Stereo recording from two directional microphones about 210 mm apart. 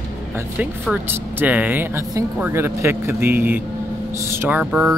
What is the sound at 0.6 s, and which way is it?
Speech, 5° right (ahead or behind).